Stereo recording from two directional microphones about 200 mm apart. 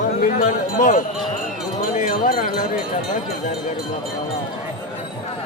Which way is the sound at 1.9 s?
40° left (ahead or behind).